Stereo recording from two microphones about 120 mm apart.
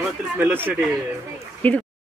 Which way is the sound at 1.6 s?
15° left (ahead or behind).